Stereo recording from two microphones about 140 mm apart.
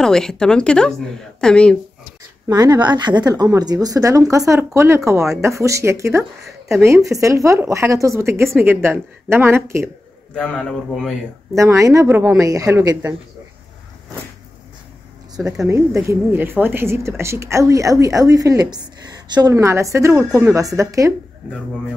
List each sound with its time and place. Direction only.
0.0 s a woman's voice: 5° left (ahead or behind)
2.4 s a woman's voice: 25° right (ahead or behind)
10.3 s a woman's voice: 10° left (ahead or behind)
11.8 s a woman's voice: 25° right (ahead or behind)
15.3 s speech: 5° right (ahead or behind)
15.7 s a woman's voice: 20° right (ahead or behind)